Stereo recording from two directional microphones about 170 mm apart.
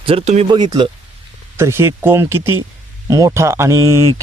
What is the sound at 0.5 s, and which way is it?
Speech, 25° right (ahead or behind).